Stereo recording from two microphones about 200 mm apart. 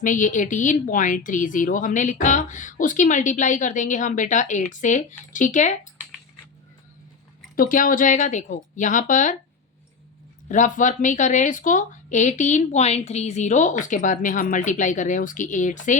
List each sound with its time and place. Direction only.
0.0 s speech: 40° left (ahead or behind)
7.5 s speech: 45° left (ahead or behind)
10.5 s speech: 40° left (ahead or behind)